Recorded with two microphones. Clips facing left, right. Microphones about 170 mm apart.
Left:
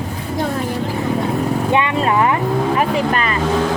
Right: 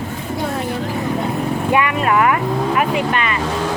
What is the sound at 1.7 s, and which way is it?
Vehicle, 25° left (ahead or behind).